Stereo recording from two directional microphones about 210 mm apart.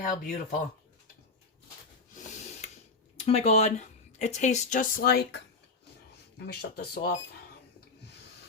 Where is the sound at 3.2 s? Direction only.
30° left (ahead or behind); by 5.4 s 45° left (ahead or behind).